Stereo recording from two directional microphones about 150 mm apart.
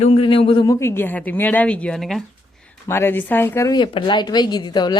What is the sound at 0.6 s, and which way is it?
A woman's voice, 20° left (ahead or behind).